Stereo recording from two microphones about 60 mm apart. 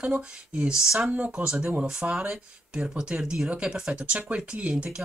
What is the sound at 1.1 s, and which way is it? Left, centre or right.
Speech, right.